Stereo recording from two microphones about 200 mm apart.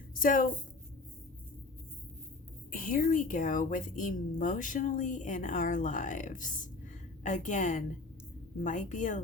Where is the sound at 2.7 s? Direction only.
40° left (ahead or behind).